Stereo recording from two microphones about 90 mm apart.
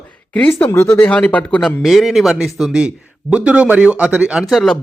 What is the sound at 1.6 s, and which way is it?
Speech, centre (ahead or behind).